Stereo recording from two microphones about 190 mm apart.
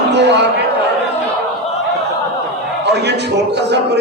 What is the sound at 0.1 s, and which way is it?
Speech, 65° right (ahead or behind).